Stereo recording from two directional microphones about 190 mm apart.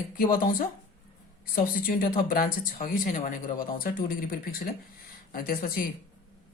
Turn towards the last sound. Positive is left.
turn(degrees=50)  # may be behind; listen again after turning